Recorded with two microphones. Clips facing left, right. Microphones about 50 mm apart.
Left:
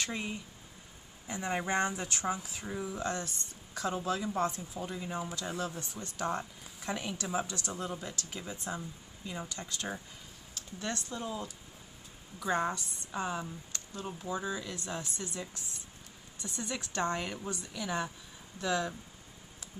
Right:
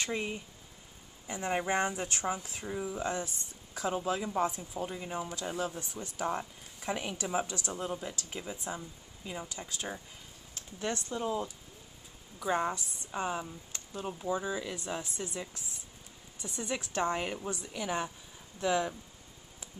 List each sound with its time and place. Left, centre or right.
0.0 s speech: centre
1.2 s speech: centre
10.5 s speech: right